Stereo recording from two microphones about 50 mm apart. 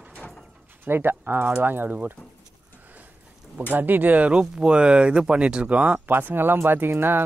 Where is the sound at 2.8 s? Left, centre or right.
Right.